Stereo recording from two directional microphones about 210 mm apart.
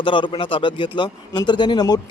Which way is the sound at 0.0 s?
25° left (ahead or behind).